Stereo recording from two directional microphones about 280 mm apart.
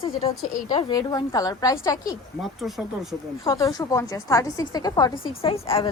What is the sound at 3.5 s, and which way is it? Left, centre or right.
A woman's voice, centre.